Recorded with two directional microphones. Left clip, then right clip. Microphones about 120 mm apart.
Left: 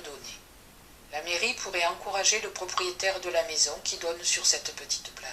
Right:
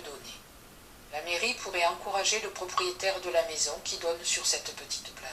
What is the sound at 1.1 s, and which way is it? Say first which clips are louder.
A woman's voice: left 2 dB; 30° left (ahead or behind).